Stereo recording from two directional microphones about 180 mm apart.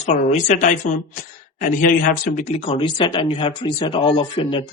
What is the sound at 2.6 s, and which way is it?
Speech, 30° left (ahead or behind).